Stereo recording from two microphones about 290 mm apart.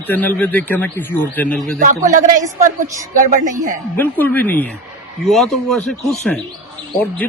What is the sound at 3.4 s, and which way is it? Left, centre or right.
Speech, right.